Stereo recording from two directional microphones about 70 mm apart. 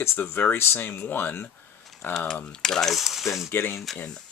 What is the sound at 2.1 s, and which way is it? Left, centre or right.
Speech, centre.